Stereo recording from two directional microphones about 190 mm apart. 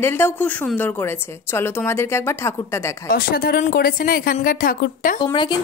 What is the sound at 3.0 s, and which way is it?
A woman's voice, 50° left (ahead or behind).